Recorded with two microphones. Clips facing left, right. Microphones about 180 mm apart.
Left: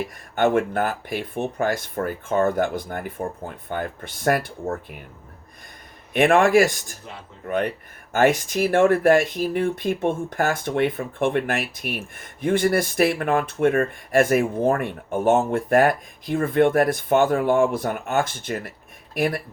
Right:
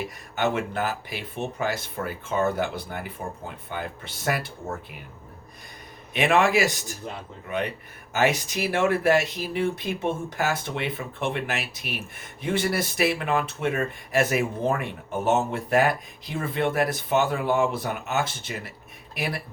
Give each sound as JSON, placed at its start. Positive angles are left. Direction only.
{"t": 0.0, "sound": "speech", "side_deg": 50}
{"t": 6.1, "sound": "speech", "side_deg": 50}